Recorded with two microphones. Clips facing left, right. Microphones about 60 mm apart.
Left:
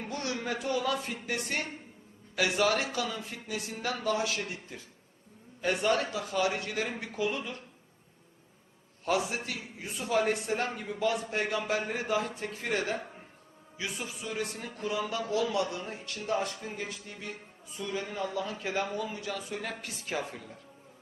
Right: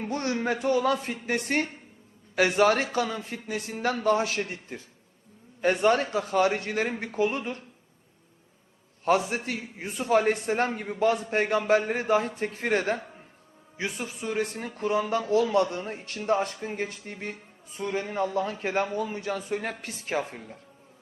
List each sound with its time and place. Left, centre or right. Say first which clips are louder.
0.0 s speech: right 6 dB; right
9.3 s speech: right 5 dB; right